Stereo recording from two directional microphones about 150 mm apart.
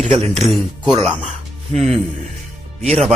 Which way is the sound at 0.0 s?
45° right (ahead or behind).